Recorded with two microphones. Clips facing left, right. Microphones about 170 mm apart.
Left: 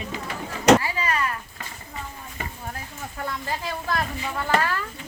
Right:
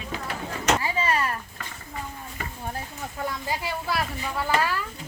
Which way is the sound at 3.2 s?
10° right (ahead or behind).